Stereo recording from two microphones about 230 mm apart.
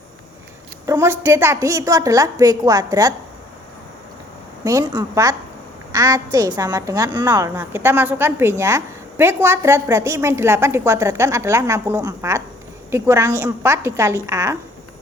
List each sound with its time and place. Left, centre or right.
0.9 s a woman's voice: centre
4.6 s a woman's voice: centre